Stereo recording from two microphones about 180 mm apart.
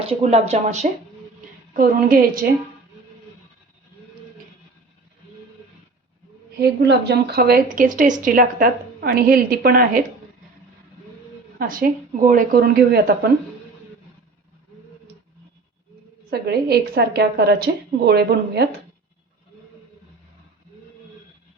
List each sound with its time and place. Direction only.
0.2 s speech: 35° right (ahead or behind)
1.7 s a woman's voice: 50° right (ahead or behind)
6.6 s a woman's voice: 65° right (ahead or behind)
11.6 s a woman's voice: 50° right (ahead or behind)
16.3 s a woman's voice: 65° right (ahead or behind)